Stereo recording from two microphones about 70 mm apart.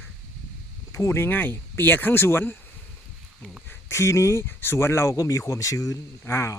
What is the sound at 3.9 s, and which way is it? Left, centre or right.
Speech, left.